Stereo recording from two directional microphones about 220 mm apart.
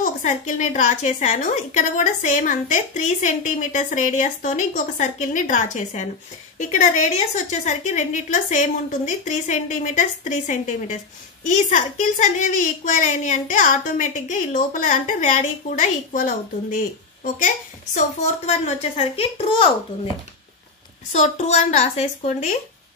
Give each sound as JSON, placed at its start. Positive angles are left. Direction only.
{"t": 0.0, "sound": "a woman's voice", "side_deg": 35}
{"t": 21.1, "sound": "a woman's voice", "side_deg": 30}